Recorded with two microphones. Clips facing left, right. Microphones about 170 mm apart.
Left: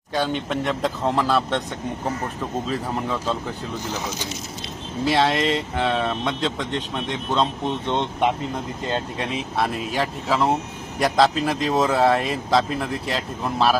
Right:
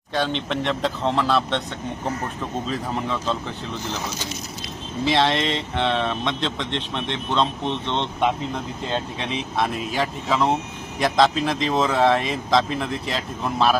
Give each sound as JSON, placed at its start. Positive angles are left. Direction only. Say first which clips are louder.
{"t": 0.1, "sound": "speech", "louder": "left 1 dB", "side_deg": 10}
{"t": 2.6, "sound": "speech", "louder": "even", "side_deg": 5}
{"t": 5.0, "sound": "speech", "louder": "left 1 dB", "side_deg": 5}